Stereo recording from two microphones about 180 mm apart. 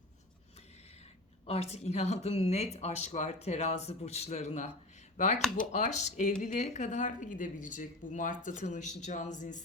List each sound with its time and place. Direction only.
1.5 s a woman's voice: 35° left (ahead or behind)